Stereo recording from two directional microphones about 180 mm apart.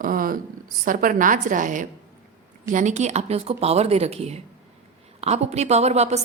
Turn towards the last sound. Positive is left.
turn(degrees=-35)  # may be behind; listen again after turning